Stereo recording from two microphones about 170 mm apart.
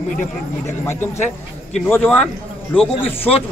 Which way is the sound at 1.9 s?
10° left (ahead or behind).